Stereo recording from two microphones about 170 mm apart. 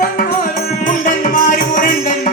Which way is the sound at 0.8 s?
50° left (ahead or behind).